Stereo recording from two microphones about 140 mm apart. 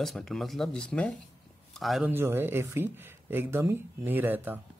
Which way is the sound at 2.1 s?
15° right (ahead or behind).